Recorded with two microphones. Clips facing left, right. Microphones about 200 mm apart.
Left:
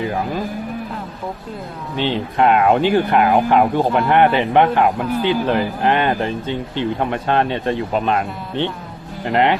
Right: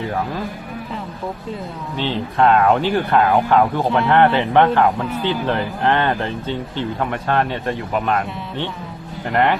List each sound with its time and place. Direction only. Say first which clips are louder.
2.0 s speech: left 1 dB; 15° left (ahead or behind)